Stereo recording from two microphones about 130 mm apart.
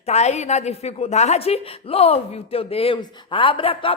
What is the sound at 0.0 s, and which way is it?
A man's voice, 55° left (ahead or behind).